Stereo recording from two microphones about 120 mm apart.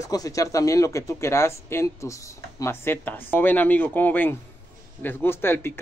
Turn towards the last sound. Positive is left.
turn(degrees=20)  # may be behind; listen again after turning